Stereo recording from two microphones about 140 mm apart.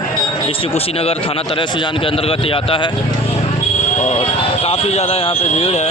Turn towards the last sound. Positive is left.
turn(degrees=45)  # may be behind; listen again after turning